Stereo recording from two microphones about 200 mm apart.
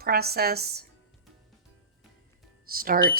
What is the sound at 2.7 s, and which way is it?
Speech, 45° right (ahead or behind).